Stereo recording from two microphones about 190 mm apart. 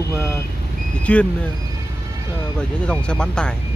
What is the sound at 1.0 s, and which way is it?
Speech, 5° left (ahead or behind).